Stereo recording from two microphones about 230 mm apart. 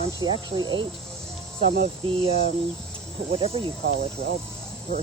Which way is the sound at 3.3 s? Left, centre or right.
Right.